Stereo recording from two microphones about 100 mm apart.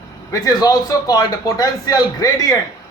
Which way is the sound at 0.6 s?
40° left (ahead or behind).